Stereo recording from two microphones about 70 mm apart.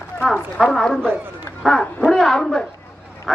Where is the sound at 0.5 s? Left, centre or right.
Centre.